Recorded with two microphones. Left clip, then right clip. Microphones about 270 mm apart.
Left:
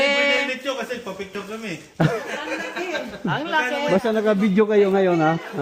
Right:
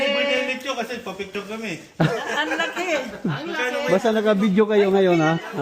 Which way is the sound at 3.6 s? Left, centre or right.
Centre.